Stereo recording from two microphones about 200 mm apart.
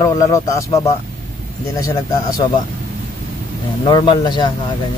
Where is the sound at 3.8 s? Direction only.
25° left (ahead or behind).